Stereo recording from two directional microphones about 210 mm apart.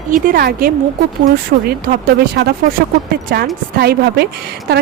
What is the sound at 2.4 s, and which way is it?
A woman's voice, 50° right (ahead or behind).